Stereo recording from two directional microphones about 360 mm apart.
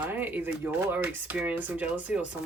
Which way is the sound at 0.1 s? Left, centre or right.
Centre.